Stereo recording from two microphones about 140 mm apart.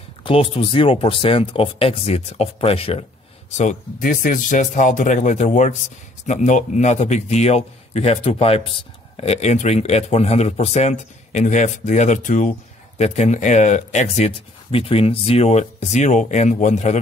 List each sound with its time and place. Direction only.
0.2 s speech: 40° left (ahead or behind)
4.0 s speech: 75° left (ahead or behind); by 17.0 s 55° left (ahead or behind)